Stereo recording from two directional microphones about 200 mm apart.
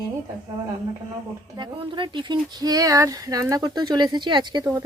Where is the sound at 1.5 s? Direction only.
25° right (ahead or behind).